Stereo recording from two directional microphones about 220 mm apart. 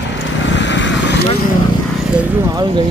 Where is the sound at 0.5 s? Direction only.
55° left (ahead or behind).